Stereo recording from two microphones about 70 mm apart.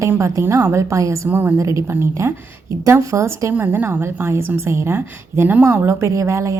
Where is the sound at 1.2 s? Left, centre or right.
Right.